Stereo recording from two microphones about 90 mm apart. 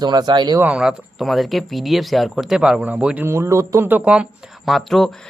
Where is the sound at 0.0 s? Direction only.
50° right (ahead or behind).